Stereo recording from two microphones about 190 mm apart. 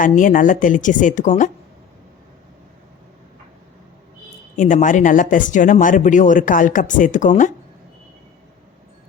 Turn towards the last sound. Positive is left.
turn(degrees=40)  # may be behind; listen again after turning